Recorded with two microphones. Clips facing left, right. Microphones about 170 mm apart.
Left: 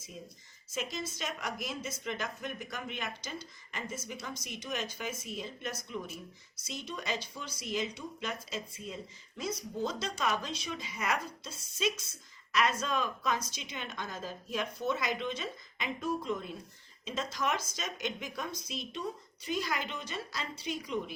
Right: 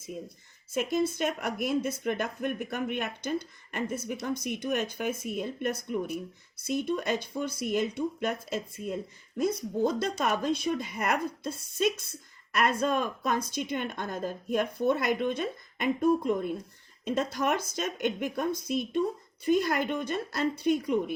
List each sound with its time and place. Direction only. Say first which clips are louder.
0.7 s a woman's voice: right 10 dB; 55° right (ahead or behind)